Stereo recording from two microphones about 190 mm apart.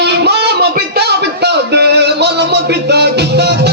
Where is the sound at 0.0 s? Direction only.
60° right (ahead or behind).